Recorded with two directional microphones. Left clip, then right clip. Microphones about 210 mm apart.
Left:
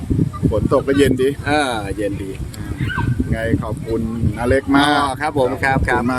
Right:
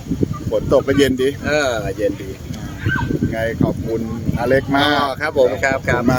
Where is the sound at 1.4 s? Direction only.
20° left (ahead or behind).